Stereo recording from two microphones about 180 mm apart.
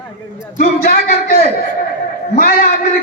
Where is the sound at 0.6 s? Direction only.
55° left (ahead or behind).